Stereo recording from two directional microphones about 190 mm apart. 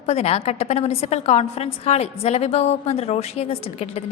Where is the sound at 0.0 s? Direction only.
35° left (ahead or behind).